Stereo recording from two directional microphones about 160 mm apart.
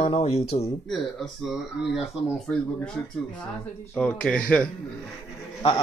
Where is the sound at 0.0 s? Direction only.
40° left (ahead or behind).